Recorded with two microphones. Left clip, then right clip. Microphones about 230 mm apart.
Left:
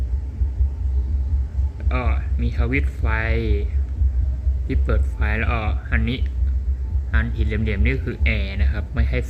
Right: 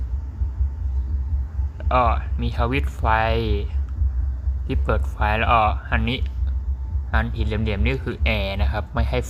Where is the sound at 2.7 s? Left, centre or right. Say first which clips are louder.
Right 4 dB; centre.